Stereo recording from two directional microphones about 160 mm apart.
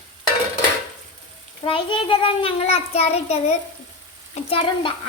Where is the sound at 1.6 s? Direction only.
35° left (ahead or behind).